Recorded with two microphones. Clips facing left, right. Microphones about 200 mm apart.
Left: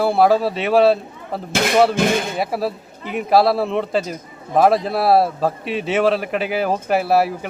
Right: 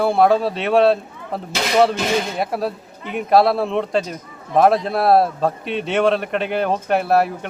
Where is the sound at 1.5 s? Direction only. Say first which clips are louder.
Left 1 dB; 55° left (ahead or behind).